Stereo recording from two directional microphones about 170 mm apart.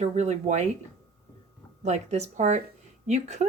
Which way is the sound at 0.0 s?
40° right (ahead or behind).